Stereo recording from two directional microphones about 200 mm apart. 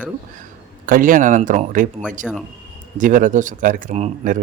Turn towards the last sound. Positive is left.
turn(degrees=-35)  # may be behind; listen again after turning